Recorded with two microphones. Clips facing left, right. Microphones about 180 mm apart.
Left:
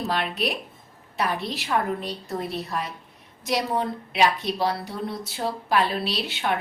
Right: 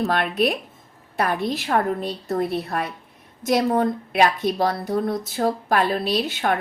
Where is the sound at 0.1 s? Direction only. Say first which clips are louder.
Right 5 dB; 50° right (ahead or behind).